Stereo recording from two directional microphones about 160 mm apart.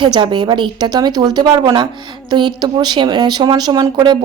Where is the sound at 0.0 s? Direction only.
30° right (ahead or behind).